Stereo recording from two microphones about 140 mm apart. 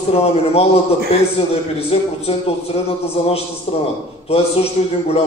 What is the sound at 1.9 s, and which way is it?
Speech, 45° left (ahead or behind).